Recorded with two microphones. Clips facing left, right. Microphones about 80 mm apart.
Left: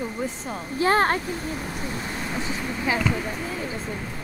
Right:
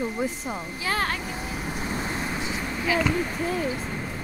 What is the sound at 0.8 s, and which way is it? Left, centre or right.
Speech, left.